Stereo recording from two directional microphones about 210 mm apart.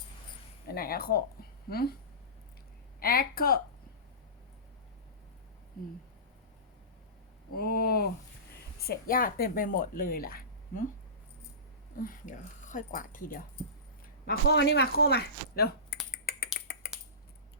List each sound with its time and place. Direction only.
0.7 s a woman's voice: 45° left (ahead or behind)
3.0 s a woman's voice: 45° left (ahead or behind)
7.5 s a woman's voice: 45° left (ahead or behind)
12.0 s speech: 40° left (ahead or behind)
14.3 s a woman's voice: 55° left (ahead or behind)
16.1 s finger snapping: 50° left (ahead or behind)